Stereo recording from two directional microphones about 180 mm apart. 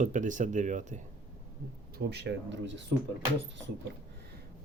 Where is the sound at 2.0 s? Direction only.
70° right (ahead or behind).